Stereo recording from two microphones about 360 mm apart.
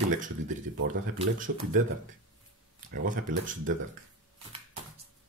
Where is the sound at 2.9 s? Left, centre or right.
Right.